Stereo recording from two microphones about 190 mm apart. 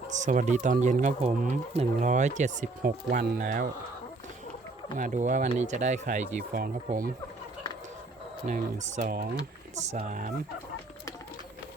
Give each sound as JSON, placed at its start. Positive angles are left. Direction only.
{"t": 0.2, "sound": "speech", "side_deg": -40}
{"t": 4.9, "sound": "speech", "side_deg": -40}
{"t": 8.4, "sound": "speech", "side_deg": -40}